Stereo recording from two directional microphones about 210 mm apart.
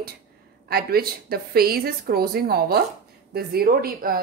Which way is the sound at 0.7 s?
45° right (ahead or behind).